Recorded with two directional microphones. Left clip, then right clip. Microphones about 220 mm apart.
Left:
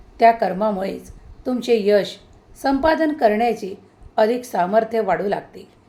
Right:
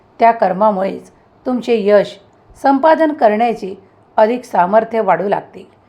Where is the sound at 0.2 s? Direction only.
15° right (ahead or behind).